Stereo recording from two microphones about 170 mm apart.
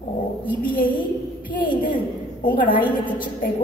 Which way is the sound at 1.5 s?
50° left (ahead or behind).